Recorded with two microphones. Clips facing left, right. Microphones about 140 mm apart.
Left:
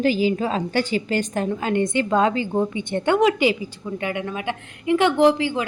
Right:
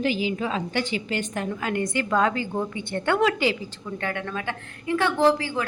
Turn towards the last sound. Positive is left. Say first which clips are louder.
# left 4 dB
turn(degrees=20)  # may be behind; listen again after turning